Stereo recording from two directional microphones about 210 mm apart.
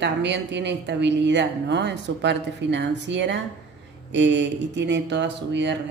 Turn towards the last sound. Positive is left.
turn(degrees=-55)  # may be behind; listen again after turning